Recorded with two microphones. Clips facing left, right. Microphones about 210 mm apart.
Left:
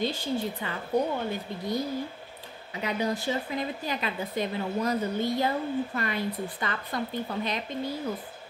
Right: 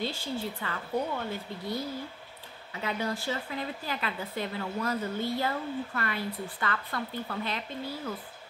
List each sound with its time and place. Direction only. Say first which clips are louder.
0.0 s a woman's voice: left 4 dB; 20° left (ahead or behind)